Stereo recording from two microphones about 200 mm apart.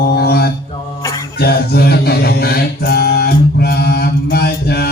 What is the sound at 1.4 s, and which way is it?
Music, 50° left (ahead or behind).